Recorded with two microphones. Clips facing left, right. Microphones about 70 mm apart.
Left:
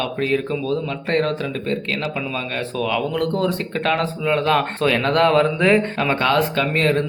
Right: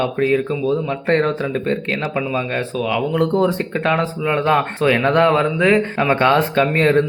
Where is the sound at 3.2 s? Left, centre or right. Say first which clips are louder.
Right 4 dB; centre.